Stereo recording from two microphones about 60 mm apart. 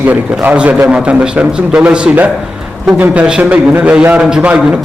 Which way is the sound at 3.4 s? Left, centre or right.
Right.